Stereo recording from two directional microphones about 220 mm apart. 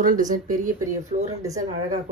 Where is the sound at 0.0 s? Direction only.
35° right (ahead or behind).